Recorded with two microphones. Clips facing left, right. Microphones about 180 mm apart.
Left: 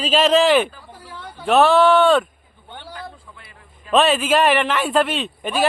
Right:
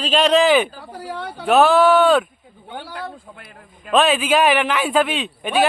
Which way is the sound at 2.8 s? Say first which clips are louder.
Right 2 dB; 70° right (ahead or behind).